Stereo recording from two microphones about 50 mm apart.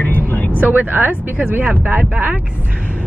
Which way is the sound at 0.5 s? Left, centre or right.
Right.